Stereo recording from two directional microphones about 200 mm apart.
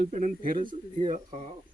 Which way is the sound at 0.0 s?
40° right (ahead or behind).